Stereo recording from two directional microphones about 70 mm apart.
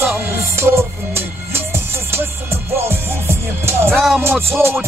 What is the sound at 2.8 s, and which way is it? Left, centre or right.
Music, right.